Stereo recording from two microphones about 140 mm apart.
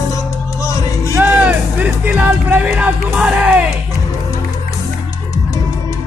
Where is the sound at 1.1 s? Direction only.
10° right (ahead or behind).